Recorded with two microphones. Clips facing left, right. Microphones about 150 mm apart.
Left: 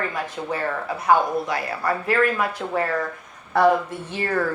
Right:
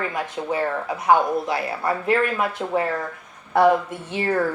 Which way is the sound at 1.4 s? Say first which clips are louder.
Right 1 dB; 25° right (ahead or behind).